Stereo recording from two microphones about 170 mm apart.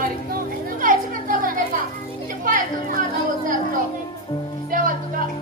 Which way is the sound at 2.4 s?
55° right (ahead or behind).